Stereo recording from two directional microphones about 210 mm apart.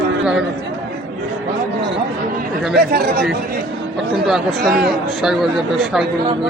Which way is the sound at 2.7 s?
50° right (ahead or behind).